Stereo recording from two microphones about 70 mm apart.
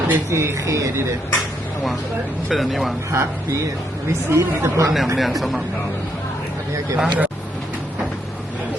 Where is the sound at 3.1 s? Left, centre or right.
Right.